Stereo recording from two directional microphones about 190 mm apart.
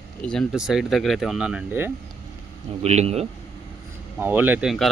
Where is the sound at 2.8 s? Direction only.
35° right (ahead or behind).